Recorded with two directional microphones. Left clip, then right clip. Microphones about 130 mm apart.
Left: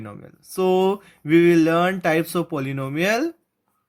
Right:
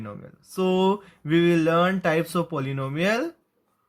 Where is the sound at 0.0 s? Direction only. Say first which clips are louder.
Even; 40° left (ahead or behind).